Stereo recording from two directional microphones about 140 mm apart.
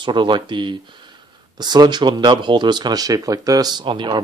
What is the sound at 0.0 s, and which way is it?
Speech, 35° right (ahead or behind).